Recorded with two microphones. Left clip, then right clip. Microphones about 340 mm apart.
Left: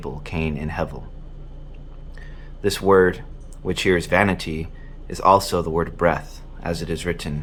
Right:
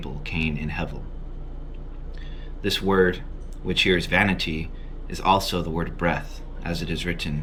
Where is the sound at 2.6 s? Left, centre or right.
Centre.